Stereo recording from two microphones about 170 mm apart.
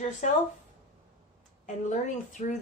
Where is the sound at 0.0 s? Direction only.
45° left (ahead or behind).